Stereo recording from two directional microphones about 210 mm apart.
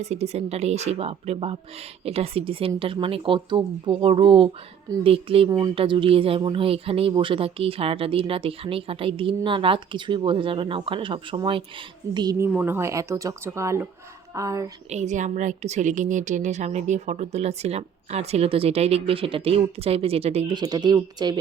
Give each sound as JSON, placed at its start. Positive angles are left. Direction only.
{"t": 0.0, "sound": "a woman's voice", "side_deg": -30}
{"t": 14.8, "sound": "a woman's voice", "side_deg": -35}